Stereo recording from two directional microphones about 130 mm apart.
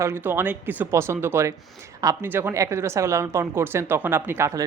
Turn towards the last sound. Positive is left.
turn(degrees=-20)  # may be behind; listen again after turning